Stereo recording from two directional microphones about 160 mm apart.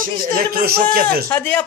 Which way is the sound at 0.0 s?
65° right (ahead or behind).